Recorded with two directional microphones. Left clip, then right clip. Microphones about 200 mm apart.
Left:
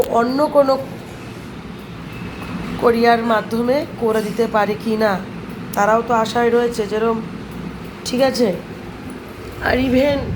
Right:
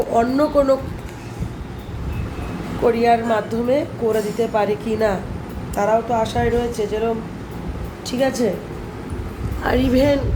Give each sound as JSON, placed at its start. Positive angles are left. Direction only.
{"t": 0.1, "sound": "speech", "side_deg": -15}
{"t": 2.8, "sound": "a woman's voice", "side_deg": -5}
{"t": 9.6, "sound": "a woman's voice", "side_deg": -20}